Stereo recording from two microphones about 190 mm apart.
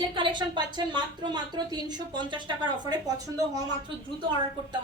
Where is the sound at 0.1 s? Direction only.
25° right (ahead or behind).